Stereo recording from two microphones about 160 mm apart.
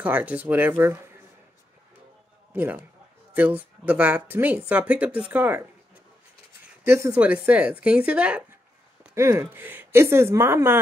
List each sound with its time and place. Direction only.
0.0 s speech: 10° right (ahead or behind)
2.5 s a man's voice: 10° right (ahead or behind)
6.8 s speech: 15° right (ahead or behind)